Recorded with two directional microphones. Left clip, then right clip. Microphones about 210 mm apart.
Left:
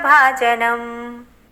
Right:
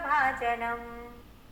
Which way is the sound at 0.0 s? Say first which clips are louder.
Left 14 dB; 45° left (ahead or behind).